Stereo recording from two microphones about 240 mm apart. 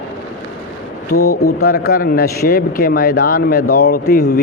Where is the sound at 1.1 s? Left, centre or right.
Left.